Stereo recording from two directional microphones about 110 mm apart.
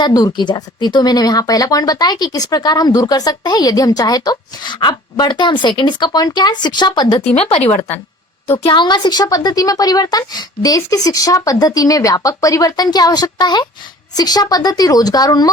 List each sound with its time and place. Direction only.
0.0 s speech: 35° left (ahead or behind)
7.7 s speech: 15° left (ahead or behind)
8.6 s speech: 45° left (ahead or behind)